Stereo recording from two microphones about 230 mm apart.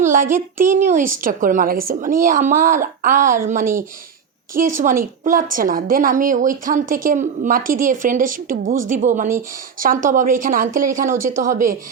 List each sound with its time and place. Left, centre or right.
0.0 s a woman's voice: right
4.7 s a woman's voice: right